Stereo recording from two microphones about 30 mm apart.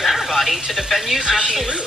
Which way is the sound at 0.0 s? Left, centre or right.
Centre.